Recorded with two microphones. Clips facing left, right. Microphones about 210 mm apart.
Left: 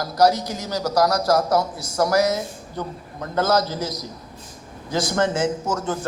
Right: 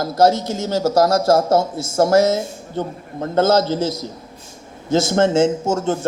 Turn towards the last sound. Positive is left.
turn(degrees=-25)  # may be behind; listen again after turning